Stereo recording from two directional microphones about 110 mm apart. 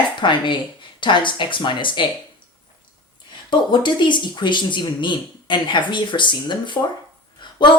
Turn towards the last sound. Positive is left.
turn(degrees=45)  # may be behind; listen again after turning